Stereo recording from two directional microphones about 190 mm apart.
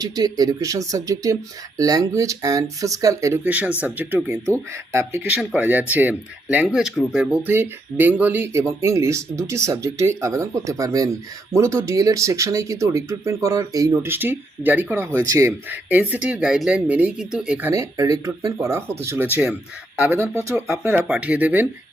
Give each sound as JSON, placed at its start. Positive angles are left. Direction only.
{"t": 0.0, "sound": "speech", "side_deg": -20}